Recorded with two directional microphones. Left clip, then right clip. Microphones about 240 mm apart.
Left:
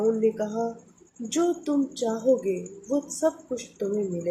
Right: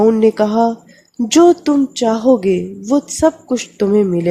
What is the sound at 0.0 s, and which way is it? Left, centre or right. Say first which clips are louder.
A woman's voice: right 12 dB; right.